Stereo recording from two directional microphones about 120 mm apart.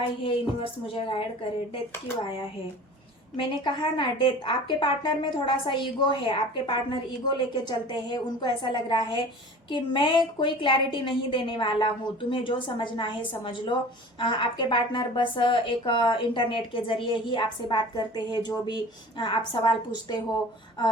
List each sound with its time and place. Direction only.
0.3 s a woman's voice: 50° left (ahead or behind)
3.3 s a woman's voice: 40° left (ahead or behind)